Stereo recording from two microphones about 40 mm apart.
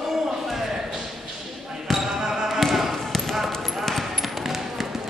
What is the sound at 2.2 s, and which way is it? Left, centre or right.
Basketball bounce, centre.